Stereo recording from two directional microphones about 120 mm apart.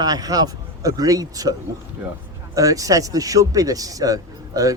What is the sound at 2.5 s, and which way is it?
Speech, 30° right (ahead or behind).